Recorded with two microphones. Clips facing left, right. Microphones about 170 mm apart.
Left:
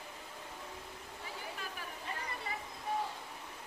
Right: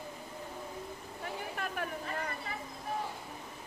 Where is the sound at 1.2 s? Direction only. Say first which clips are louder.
Right 7 dB; 60° right (ahead or behind).